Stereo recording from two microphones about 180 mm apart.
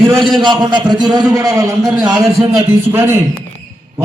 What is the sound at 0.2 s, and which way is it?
Speech, centre (ahead or behind).